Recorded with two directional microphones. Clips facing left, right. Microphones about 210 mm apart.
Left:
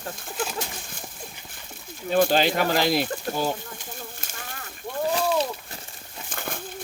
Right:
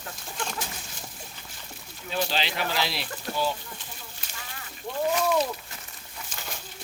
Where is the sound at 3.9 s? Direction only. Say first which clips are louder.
Left 6 dB; 50° left (ahead or behind).